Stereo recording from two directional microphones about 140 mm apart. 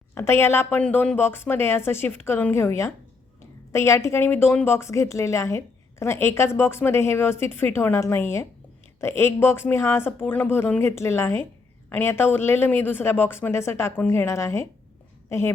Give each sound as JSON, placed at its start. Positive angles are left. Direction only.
{"t": 0.1, "sound": "a woman's voice", "side_deg": 15}